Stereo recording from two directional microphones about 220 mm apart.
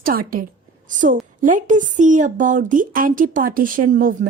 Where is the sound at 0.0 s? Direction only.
40° right (ahead or behind).